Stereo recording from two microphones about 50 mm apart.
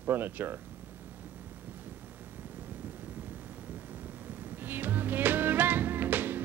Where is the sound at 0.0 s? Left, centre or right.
Right.